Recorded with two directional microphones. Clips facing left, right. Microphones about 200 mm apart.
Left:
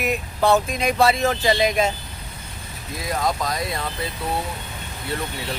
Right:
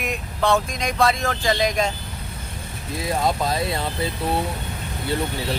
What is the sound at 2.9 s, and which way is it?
Speech, 25° right (ahead or behind).